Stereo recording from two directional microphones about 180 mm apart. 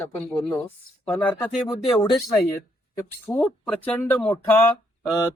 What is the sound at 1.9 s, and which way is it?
Speech, 25° left (ahead or behind).